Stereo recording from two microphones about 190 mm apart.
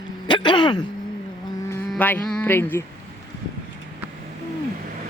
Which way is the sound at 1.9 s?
10° left (ahead or behind).